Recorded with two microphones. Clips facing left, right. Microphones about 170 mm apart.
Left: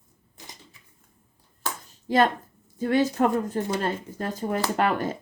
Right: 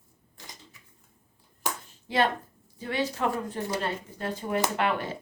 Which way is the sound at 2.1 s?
45° left (ahead or behind).